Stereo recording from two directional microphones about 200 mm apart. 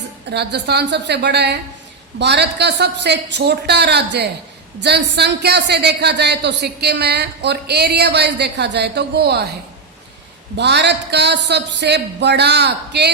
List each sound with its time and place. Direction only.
0.3 s a woman's voice: 55° right (ahead or behind)
10.6 s a woman's voice: 60° right (ahead or behind)